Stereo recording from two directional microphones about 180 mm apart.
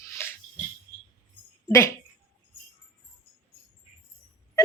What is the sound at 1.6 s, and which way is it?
Speech, 15° left (ahead or behind).